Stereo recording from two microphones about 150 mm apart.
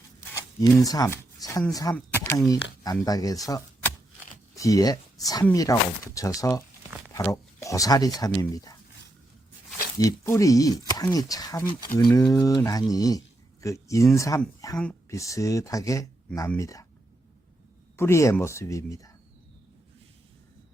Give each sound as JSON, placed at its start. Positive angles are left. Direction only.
{"t": 0.2, "sound": "speech", "side_deg": 20}
{"t": 10.0, "sound": "speech", "side_deg": 20}
{"t": 17.9, "sound": "speech", "side_deg": 15}